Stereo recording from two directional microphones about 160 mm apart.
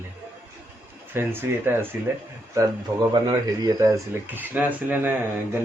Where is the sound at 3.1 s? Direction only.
25° right (ahead or behind).